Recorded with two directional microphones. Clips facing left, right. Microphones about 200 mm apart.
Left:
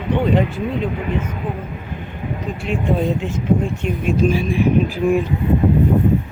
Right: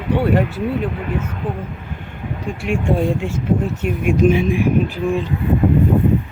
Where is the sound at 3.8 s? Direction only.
10° right (ahead or behind).